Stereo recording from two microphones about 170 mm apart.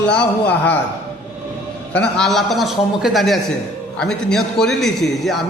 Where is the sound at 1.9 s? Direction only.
5° left (ahead or behind).